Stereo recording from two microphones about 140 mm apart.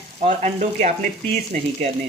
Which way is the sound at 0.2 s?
55° right (ahead or behind).